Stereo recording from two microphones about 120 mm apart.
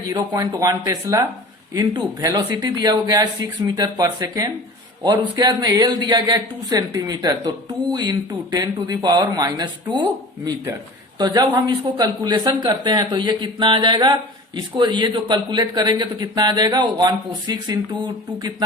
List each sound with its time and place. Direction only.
0.1 s speech: 30° right (ahead or behind)